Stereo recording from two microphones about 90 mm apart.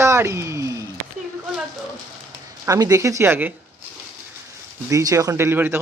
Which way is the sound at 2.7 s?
40° right (ahead or behind).